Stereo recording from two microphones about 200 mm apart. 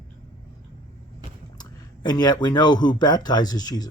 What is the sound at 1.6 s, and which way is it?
Speech, 20° left (ahead or behind).